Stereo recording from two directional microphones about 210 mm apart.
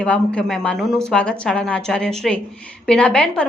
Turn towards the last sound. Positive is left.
turn(degrees=5)  # may be behind; listen again after turning